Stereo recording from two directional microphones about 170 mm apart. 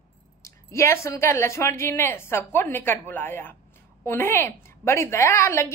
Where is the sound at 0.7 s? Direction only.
15° left (ahead or behind).